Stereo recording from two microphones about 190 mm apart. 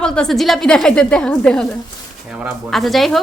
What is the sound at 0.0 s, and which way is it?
A woman's voice, 5° left (ahead or behind).